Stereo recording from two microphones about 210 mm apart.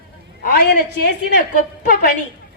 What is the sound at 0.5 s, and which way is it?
Speech, 55° left (ahead or behind).